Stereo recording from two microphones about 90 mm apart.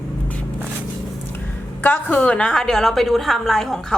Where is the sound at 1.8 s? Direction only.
20° left (ahead or behind).